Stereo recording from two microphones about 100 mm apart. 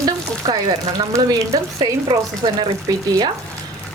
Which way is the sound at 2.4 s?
50° right (ahead or behind).